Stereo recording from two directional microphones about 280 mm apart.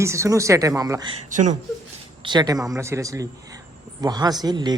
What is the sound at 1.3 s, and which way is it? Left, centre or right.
Speech, right.